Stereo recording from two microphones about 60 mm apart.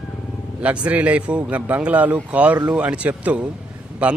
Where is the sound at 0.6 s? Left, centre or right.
Right.